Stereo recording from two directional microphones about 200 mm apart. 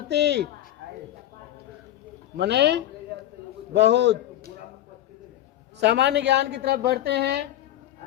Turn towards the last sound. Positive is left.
turn(degrees=-55)  # may be behind; listen again after turning